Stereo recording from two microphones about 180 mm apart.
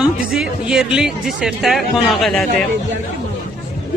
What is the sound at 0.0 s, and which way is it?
Speech, 5° right (ahead or behind).